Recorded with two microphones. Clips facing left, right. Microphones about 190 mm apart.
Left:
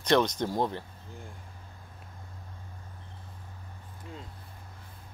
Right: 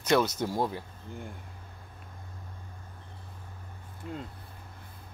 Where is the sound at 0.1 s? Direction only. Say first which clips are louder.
Left 1 dB; 10° right (ahead or behind).